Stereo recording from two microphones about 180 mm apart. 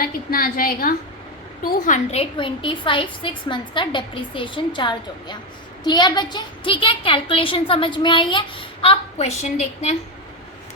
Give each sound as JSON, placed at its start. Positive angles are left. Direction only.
{"t": 0.0, "sound": "a woman's voice", "side_deg": 55}